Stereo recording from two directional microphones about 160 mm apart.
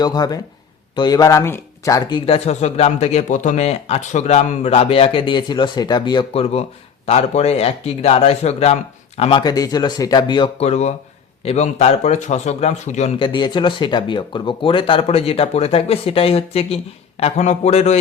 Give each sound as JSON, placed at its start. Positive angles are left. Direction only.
{"t": 0.0, "sound": "speech", "side_deg": 25}
{"t": 9.4, "sound": "speech", "side_deg": 25}
{"t": 10.6, "sound": "speech", "side_deg": 45}
{"t": 13.1, "sound": "speech", "side_deg": 30}